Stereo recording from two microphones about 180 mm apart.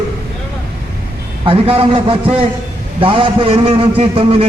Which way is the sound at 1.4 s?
30° right (ahead or behind).